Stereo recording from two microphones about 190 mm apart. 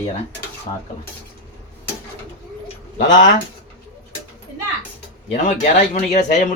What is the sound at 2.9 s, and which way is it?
Speech, 40° left (ahead or behind).